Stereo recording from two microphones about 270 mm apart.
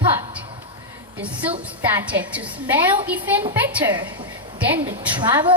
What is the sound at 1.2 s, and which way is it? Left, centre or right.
Speech, centre.